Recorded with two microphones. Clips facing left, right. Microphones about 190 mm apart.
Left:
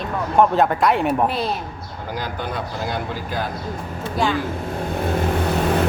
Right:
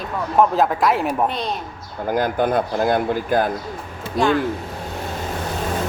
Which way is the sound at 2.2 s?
50° right (ahead or behind).